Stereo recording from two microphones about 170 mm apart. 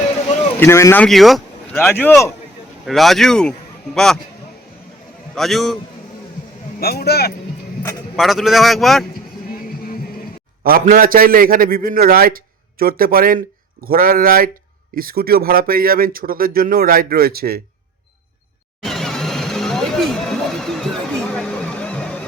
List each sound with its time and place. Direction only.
0.6 s speech: 15° left (ahead or behind)
1.0 s a man's voice: centre (ahead or behind)
1.7 s speech: 10° left (ahead or behind)
2.8 s a man's voice: centre (ahead or behind)
5.3 s a man's voice: centre (ahead or behind)
6.7 s a man's voice: 65° left (ahead or behind)
8.1 s a man's voice: centre (ahead or behind)
9.6 s music: 60° left (ahead or behind)
10.6 s speech: 60° right (ahead or behind)
18.8 s a sound: centre (ahead or behind)